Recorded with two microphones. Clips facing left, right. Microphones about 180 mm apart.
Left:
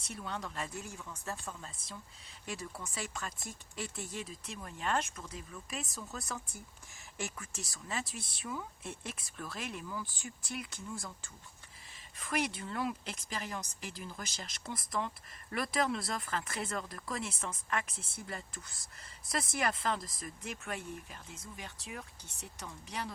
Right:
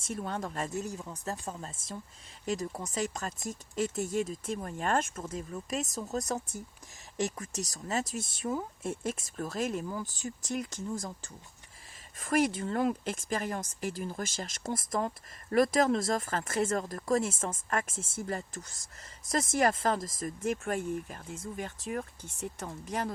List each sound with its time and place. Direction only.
0.0 s speech: 45° right (ahead or behind)